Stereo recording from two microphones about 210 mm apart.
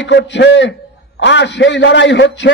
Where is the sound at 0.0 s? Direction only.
60° left (ahead or behind).